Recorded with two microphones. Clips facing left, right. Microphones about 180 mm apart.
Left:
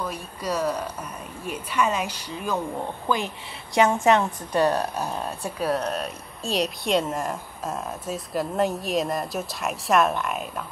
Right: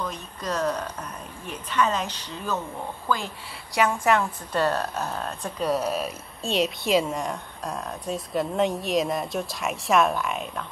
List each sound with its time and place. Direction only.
0.0 s a woman's voice: 10° left (ahead or behind)
5.8 s speech: 5° right (ahead or behind)